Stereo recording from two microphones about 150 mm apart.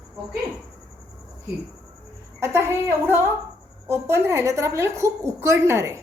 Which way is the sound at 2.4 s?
15° right (ahead or behind).